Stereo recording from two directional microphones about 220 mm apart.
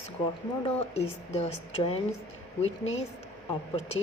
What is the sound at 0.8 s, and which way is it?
Speech, 30° left (ahead or behind).